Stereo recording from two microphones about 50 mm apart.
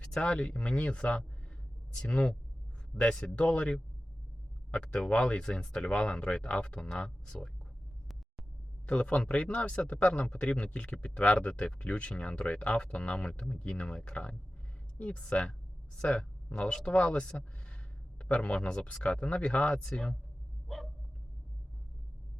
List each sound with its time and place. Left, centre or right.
0.0 s speech: centre
8.9 s speech: left
20.7 s dog: centre